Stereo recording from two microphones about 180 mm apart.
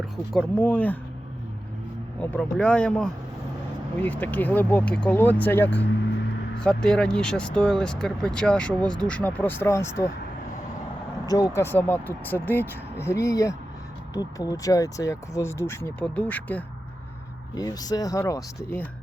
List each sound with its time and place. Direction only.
0.3 s speech: 10° left (ahead or behind)
2.3 s speech: 5° left (ahead or behind)
11.3 s speech: 20° left (ahead or behind)
17.5 s speech: 20° left (ahead or behind)